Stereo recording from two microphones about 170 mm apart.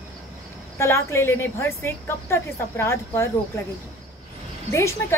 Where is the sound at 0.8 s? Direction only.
15° left (ahead or behind).